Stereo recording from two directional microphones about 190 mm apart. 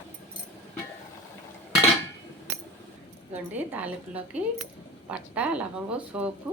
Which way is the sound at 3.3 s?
10° right (ahead or behind).